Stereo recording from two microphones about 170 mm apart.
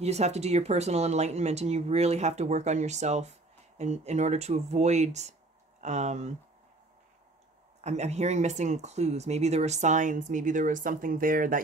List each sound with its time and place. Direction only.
0.0 s speech: 40° right (ahead or behind)
7.8 s speech: 40° right (ahead or behind)